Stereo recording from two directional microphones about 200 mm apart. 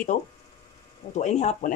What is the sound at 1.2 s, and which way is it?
Speech, 35° left (ahead or behind).